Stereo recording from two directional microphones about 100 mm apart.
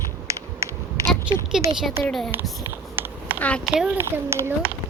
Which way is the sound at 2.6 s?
20° right (ahead or behind).